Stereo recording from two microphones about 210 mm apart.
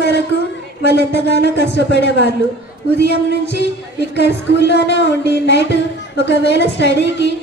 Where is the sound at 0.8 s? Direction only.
55° left (ahead or behind).